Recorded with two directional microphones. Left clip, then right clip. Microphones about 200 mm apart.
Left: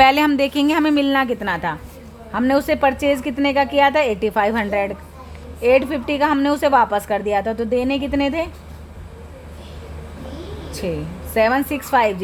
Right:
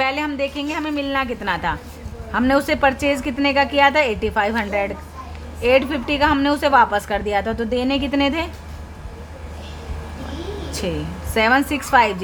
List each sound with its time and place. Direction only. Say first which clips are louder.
0.0 s a woman's voice: left 7 dB; 50° left (ahead or behind); by 8.4 s 15° left (ahead or behind)
10.7 s a sound: left 1 dB; 10° left (ahead or behind)
11.3 s a woman's voice: even; 10° left (ahead or behind)